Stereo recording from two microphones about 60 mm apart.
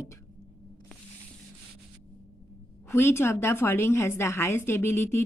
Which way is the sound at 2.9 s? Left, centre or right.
Left.